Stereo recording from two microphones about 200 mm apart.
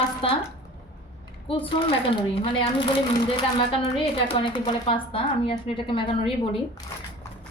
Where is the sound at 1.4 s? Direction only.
25° left (ahead or behind).